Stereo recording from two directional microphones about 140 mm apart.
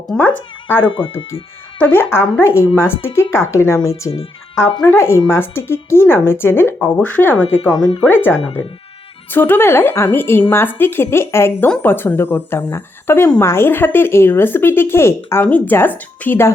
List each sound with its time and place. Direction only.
0.2 s speech: 10° left (ahead or behind)
4.1 s speech: 35° left (ahead or behind)
4.9 s speech: 20° left (ahead or behind)